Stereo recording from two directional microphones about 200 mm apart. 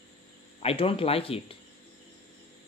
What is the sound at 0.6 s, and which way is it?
Speech, 30° left (ahead or behind).